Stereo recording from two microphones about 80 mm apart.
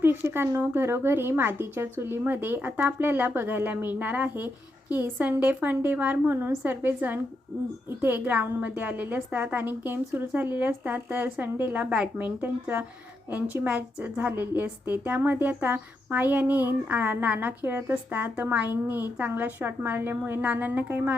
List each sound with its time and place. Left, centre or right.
0.0 s a woman's voice: right